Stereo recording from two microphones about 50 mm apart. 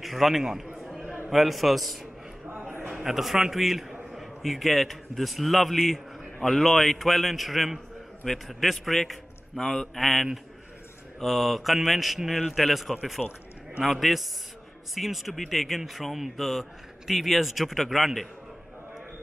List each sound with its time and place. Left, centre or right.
0.0 s a man's voice: centre
1.0 s a sound: right
1.3 s a man's voice: centre
3.0 s a man's voice: centre
13.2 s a man's voice: centre